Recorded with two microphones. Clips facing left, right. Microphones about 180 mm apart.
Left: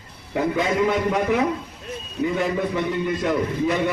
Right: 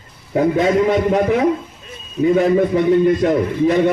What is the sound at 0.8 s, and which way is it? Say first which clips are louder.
A man's voice: right 5 dB; 35° right (ahead or behind).